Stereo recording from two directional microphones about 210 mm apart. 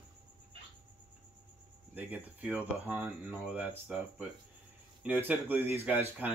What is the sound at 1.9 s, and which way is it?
Speech, 10° right (ahead or behind).